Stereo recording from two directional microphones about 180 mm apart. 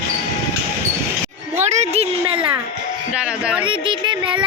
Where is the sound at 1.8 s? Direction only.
35° right (ahead or behind).